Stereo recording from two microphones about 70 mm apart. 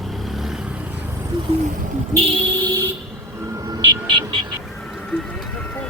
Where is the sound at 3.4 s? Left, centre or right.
Right.